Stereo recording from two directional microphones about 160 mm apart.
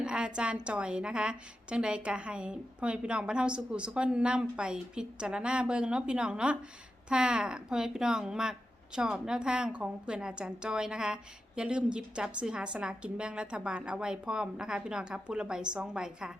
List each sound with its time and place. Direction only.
0.0 s speech: 5° right (ahead or behind)